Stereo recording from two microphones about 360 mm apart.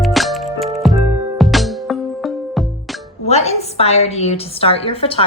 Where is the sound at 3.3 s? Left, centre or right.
Centre.